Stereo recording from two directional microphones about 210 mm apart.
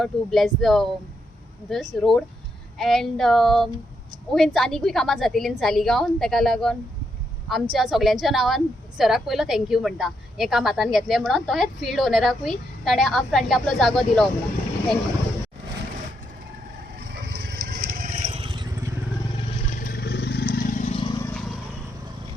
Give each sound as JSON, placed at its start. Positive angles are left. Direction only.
{"t": 0.0, "sound": "a woman's voice", "side_deg": 0}
{"t": 17.7, "sound": "vehicle", "side_deg": -40}
{"t": 19.8, "sound": "vehicle", "side_deg": 50}